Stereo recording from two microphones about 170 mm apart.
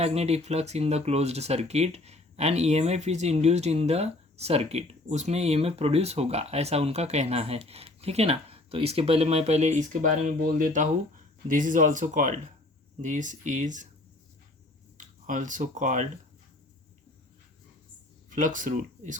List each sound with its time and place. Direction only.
0.0 s speech: 40° right (ahead or behind)
14.9 s speech: 50° right (ahead or behind)
18.3 s speech: 50° right (ahead or behind)